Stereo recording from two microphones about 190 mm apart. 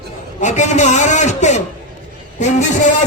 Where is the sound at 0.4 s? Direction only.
40° left (ahead or behind).